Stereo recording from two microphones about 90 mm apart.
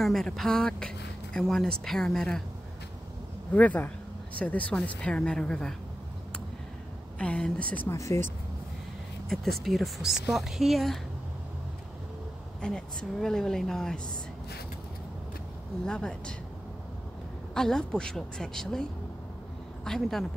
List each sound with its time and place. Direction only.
0.0 s speech: 5° left (ahead or behind)
3.5 s speech: 20° left (ahead or behind)
7.2 s speech: 10° left (ahead or behind)
7.9 s speech: 35° left (ahead or behind)
9.3 s speech: centre (ahead or behind)
12.6 s speech: 5° left (ahead or behind)
15.8 s speech: 10° left (ahead or behind)
17.6 s speech: 5° left (ahead or behind)